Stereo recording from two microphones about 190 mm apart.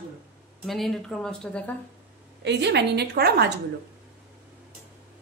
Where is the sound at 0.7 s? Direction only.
Centre (ahead or behind).